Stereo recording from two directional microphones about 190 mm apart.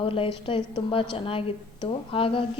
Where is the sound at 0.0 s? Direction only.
30° left (ahead or behind).